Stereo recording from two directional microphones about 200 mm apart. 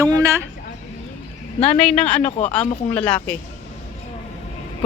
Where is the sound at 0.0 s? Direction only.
15° right (ahead or behind).